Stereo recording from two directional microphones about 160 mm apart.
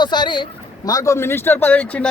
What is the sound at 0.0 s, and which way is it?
Speech, 30° left (ahead or behind).